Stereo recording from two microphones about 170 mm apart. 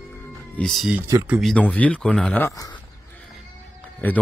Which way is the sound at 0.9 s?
20° right (ahead or behind).